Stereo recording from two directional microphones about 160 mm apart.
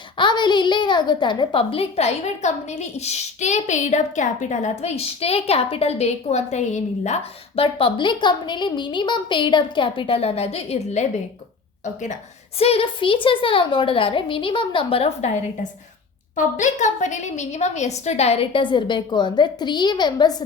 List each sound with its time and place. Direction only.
0.2 s a woman's voice: 30° left (ahead or behind)
12.5 s a woman's voice: 40° left (ahead or behind)
16.3 s a woman's voice: 50° left (ahead or behind); by 20.3 s 25° left (ahead or behind)